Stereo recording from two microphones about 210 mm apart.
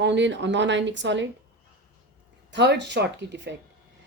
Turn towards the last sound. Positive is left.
turn(degrees=-55)  # may be behind; listen again after turning